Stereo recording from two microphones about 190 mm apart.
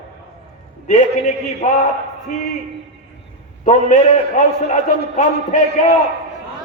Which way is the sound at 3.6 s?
40° left (ahead or behind).